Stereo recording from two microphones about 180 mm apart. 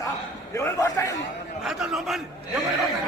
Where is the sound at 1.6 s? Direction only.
Centre (ahead or behind).